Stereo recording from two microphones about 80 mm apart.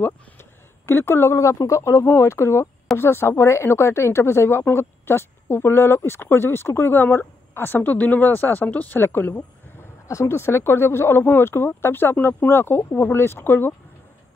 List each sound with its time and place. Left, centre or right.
0.0 s speech: left